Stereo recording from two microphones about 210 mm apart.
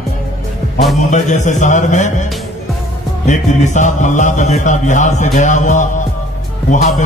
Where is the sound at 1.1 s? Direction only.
35° left (ahead or behind).